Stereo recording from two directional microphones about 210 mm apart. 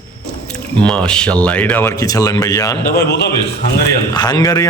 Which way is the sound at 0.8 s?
5° left (ahead or behind).